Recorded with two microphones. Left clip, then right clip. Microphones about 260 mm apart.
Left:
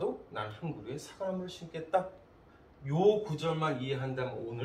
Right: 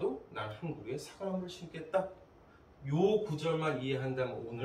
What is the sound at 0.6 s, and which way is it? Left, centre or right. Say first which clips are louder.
Speech: even; centre.